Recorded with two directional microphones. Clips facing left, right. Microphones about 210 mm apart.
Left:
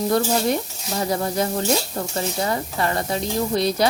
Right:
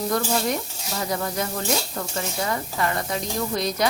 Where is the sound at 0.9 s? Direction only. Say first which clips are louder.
Left 4 dB; 30° left (ahead or behind).